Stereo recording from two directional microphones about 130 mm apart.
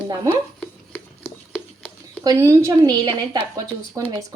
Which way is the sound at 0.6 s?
15° left (ahead or behind).